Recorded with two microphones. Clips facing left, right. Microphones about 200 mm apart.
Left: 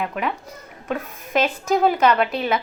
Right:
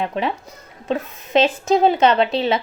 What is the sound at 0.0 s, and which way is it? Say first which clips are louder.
A woman's voice: right 3 dB; 30° right (ahead or behind).